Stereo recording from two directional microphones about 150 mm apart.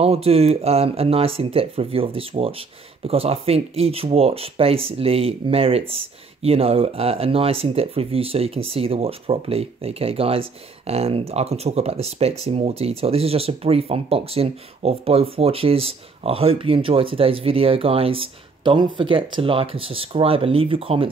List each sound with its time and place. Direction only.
0.0 s speech: 40° right (ahead or behind)